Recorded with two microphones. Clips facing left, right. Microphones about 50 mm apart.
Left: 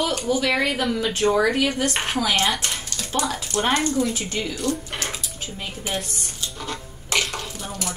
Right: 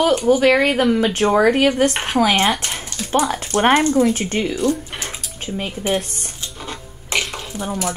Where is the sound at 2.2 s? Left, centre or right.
Right.